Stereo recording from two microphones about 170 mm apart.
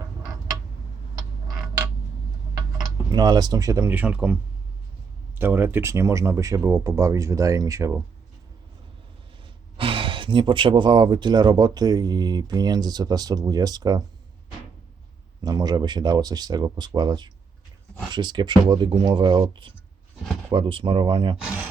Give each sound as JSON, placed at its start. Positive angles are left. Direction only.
{"t": 2.8, "sound": "speech", "side_deg": -25}
{"t": 5.4, "sound": "speech", "side_deg": -10}
{"t": 9.7, "sound": "speech", "side_deg": -30}
{"t": 15.4, "sound": "speech", "side_deg": -25}